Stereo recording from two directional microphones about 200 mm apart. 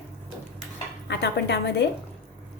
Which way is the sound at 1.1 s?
60° left (ahead or behind).